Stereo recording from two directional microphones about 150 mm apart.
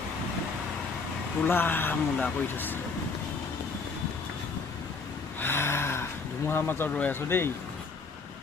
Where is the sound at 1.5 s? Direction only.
15° left (ahead or behind).